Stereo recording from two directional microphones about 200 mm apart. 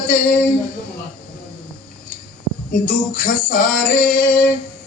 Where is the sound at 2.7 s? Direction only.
40° left (ahead or behind).